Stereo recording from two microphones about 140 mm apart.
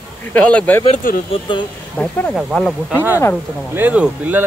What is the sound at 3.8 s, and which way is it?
Speech, 10° right (ahead or behind).